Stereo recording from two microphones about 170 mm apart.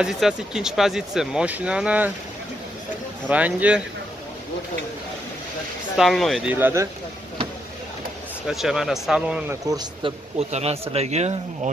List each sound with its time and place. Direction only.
0.0 s speech: 5° right (ahead or behind)
3.3 s speech: 10° right (ahead or behind)
5.9 s speech: centre (ahead or behind)
6.5 s speech: 15° right (ahead or behind)
8.5 s speech: centre (ahead or behind)
9.7 s speech: 25° right (ahead or behind)
10.5 s speech: 35° right (ahead or behind)